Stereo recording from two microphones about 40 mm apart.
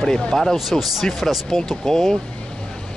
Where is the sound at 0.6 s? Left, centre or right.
Centre.